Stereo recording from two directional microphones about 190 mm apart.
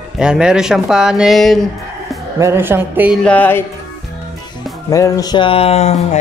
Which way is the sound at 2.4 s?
10° right (ahead or behind).